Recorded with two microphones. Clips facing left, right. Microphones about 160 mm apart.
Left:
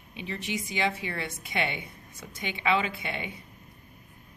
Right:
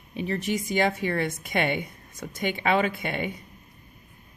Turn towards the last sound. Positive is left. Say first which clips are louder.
# right 6 dB
turn(degrees=-50)  # may be behind; listen again after turning